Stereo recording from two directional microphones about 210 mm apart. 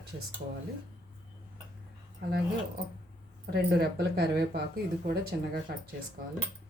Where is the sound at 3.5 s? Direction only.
50° right (ahead or behind).